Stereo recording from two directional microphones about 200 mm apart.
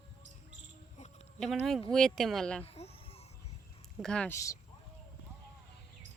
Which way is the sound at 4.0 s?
5° left (ahead or behind).